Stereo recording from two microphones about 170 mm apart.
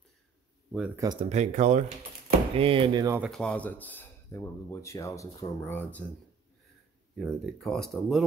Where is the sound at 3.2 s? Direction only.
5° left (ahead or behind).